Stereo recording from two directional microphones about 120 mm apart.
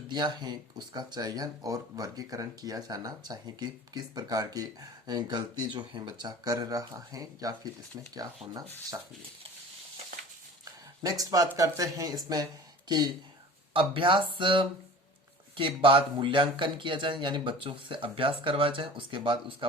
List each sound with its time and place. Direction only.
0.1 s speech: 35° right (ahead or behind)
11.0 s speech: 30° right (ahead or behind)
13.7 s speech: 45° right (ahead or behind)